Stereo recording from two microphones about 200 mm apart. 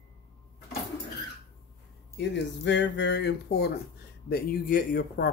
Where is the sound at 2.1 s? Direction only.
60° left (ahead or behind).